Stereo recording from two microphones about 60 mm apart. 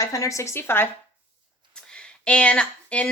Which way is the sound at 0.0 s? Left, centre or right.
Left.